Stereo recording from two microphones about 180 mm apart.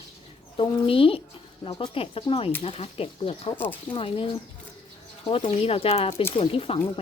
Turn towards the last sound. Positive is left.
turn(degrees=30)  # may be behind; listen again after turning